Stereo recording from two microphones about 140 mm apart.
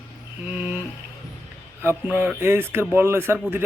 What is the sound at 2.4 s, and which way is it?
Speech, 15° right (ahead or behind).